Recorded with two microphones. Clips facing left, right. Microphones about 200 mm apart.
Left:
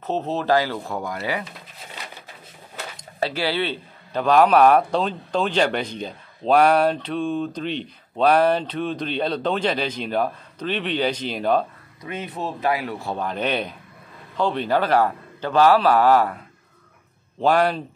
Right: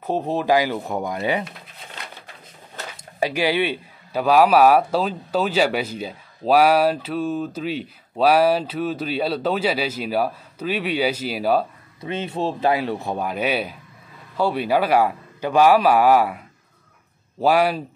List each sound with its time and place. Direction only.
0.0 s a man's voice: 10° right (ahead or behind)
3.0 s a man's voice: 15° right (ahead or behind)
12.0 s speech: 25° right (ahead or behind)
13.1 s a man's voice: 10° right (ahead or behind)
17.4 s a man's voice: 10° right (ahead or behind)